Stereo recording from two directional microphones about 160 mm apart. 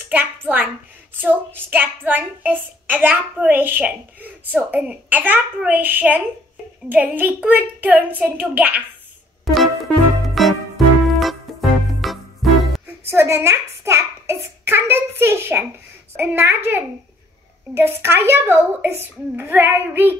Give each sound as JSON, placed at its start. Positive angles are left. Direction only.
{"t": 0.0, "sound": "a child's voice", "side_deg": -10}
{"t": 9.4, "sound": "music", "side_deg": 0}
{"t": 12.0, "sound": "music", "side_deg": 0}
{"t": 12.8, "sound": "a woman's voice", "side_deg": -15}